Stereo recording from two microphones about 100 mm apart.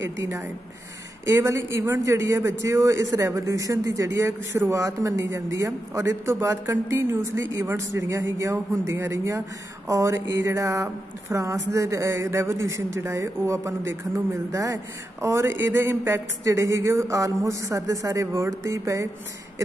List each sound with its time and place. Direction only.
0.2 s a man's voice: 30° right (ahead or behind)